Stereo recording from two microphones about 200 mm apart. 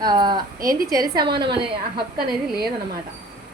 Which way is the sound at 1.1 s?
20° right (ahead or behind).